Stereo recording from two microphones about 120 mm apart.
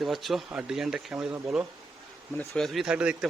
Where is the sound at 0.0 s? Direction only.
Centre (ahead or behind).